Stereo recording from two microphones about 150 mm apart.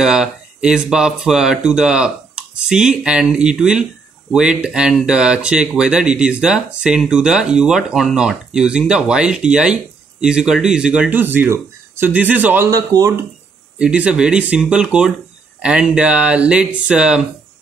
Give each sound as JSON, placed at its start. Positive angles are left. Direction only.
{"t": 0.0, "sound": "speech", "side_deg": -5}
{"t": 12.7, "sound": "speech", "side_deg": -20}
{"t": 13.7, "sound": "speech", "side_deg": -5}